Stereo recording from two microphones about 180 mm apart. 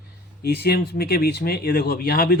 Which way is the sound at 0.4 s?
60° left (ahead or behind).